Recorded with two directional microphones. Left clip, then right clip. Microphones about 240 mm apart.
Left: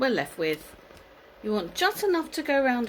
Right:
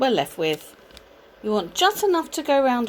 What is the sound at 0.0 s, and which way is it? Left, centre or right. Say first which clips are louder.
Speech: right 5 dB; centre.